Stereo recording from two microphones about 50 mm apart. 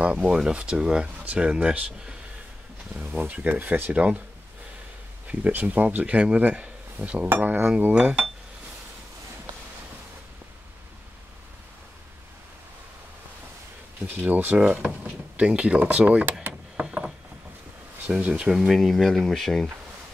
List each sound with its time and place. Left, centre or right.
0.2 s speech: centre
1.1 s a sound: right
1.4 s speech: right
3.2 s speech: right
5.3 s speech: right
6.1 s speech: right
7.2 s dishes: right
7.9 s speech: right
14.0 s speech: right
14.7 s speech: right
16.7 s a sound: centre
18.3 s speech: centre
18.6 s speech: centre